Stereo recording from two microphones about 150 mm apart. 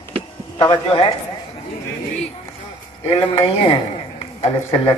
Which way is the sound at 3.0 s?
40° left (ahead or behind).